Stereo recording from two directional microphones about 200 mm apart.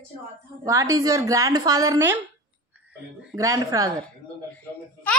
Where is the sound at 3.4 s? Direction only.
15° right (ahead or behind).